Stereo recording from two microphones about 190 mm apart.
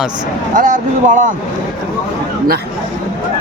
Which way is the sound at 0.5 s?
45° right (ahead or behind).